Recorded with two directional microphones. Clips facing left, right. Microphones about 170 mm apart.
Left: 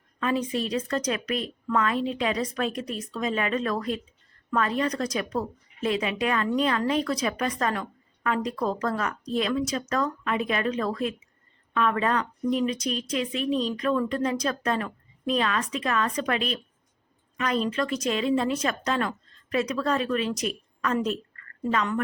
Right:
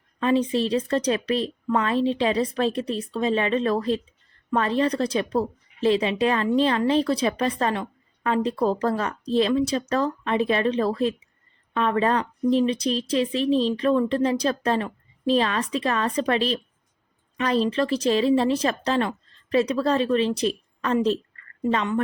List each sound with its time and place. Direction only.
0.2 s a woman's voice: 30° right (ahead or behind)